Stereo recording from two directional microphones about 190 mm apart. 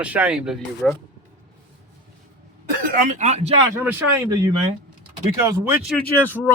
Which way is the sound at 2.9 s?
45° right (ahead or behind).